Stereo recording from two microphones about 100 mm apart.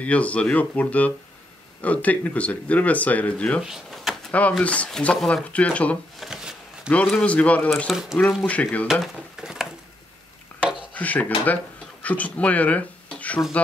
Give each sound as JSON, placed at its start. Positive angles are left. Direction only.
{"t": 0.0, "sound": "speech", "side_deg": 15}
{"t": 3.6, "sound": "a sound", "side_deg": -5}
{"t": 4.3, "sound": "speech", "side_deg": 15}
{"t": 6.1, "sound": "a sound", "side_deg": -5}
{"t": 7.1, "sound": "speech", "side_deg": 10}
{"t": 7.7, "sound": "speech", "side_deg": 0}
{"t": 8.5, "sound": "speech", "side_deg": 15}
{"t": 9.0, "sound": "a sound", "side_deg": -5}
{"t": 10.9, "sound": "speech", "side_deg": 15}